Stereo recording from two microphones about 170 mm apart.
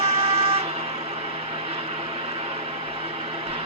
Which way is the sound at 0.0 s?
35° right (ahead or behind).